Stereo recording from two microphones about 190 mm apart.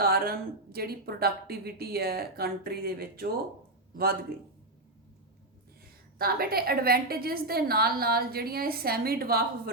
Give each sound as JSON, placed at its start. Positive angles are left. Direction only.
{"t": 0.0, "sound": "a woman's voice", "side_deg": -50}
{"t": 6.1, "sound": "a woman's voice", "side_deg": -50}